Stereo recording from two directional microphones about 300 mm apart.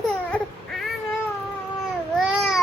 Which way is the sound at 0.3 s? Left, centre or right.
Centre.